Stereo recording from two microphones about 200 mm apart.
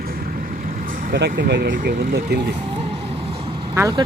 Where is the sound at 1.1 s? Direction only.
60° right (ahead or behind).